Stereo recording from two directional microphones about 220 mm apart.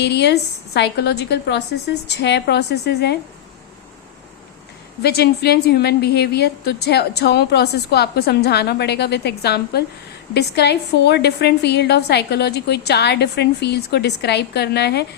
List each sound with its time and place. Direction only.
0.0 s a woman's voice: 50° left (ahead or behind)
5.0 s a woman's voice: 45° left (ahead or behind)